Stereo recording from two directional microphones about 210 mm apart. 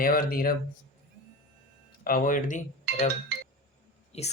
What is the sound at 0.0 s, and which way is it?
Speech, 45° left (ahead or behind).